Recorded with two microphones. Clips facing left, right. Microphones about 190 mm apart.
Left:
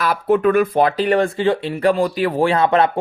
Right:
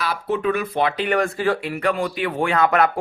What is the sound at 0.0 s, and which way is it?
Speech, 50° left (ahead or behind).